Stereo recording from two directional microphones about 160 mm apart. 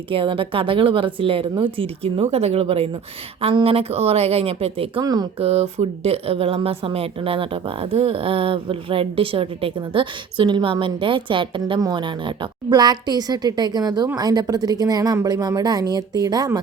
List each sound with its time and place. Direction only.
0.1 s speech: 35° right (ahead or behind)
5.0 s a woman's voice: 25° right (ahead or behind)
5.4 s a woman's voice: 40° right (ahead or behind); by 16.6 s 20° right (ahead or behind)